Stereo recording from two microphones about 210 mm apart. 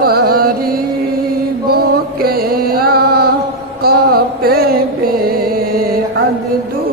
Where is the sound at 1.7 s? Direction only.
45° right (ahead or behind).